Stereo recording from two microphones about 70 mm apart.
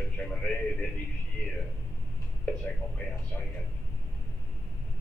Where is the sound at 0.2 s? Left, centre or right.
Centre.